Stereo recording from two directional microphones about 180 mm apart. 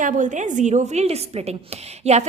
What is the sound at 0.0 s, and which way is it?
A woman's voice, 45° right (ahead or behind).